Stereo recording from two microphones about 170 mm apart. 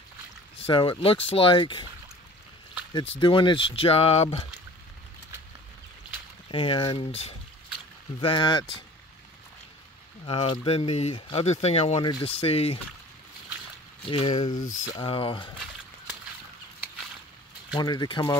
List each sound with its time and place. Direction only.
0.6 s speech: 30° left (ahead or behind)
3.2 s speech: 30° left (ahead or behind)
6.5 s speech: 30° left (ahead or behind)
10.2 s speech: 30° left (ahead or behind)
14.0 s speech: 30° left (ahead or behind)
17.7 s speech: 25° left (ahead or behind)